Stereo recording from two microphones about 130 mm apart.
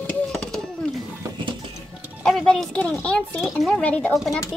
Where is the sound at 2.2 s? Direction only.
5° left (ahead or behind).